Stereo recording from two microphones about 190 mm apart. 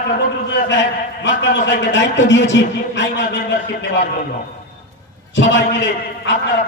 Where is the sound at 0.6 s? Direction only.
70° left (ahead or behind).